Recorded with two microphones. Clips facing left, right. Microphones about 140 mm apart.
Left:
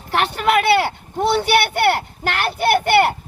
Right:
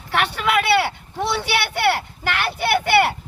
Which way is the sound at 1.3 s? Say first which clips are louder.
Left 7 dB; 50° left (ahead or behind).